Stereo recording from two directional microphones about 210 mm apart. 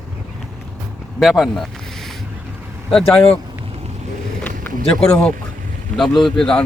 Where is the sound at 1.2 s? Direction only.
Centre (ahead or behind).